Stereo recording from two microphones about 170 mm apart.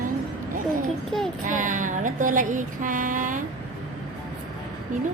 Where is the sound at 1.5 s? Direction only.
50° right (ahead or behind).